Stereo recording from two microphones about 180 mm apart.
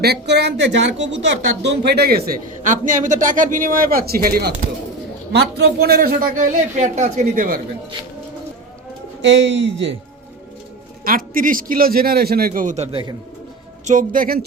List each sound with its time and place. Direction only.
0.0 s a man's voice: 65° right (ahead or behind); by 7.6 s 50° right (ahead or behind)
9.2 s a man's voice: 80° right
11.0 s a man's voice: 50° right (ahead or behind); by 13.1 s 30° right (ahead or behind)
13.8 s a man's voice: 45° right (ahead or behind)